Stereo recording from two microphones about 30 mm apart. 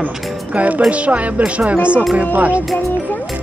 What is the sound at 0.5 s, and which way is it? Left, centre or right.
Speech, right.